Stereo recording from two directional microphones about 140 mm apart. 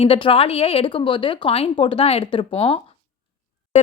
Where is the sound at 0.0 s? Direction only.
40° left (ahead or behind).